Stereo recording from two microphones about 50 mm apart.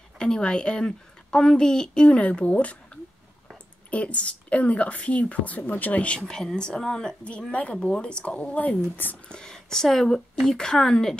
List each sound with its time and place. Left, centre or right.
0.2 s speech: centre; by 9.2 s left
9.3 s speech: centre